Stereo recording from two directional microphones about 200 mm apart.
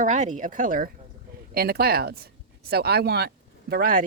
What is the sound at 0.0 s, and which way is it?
Speech, 40° right (ahead or behind).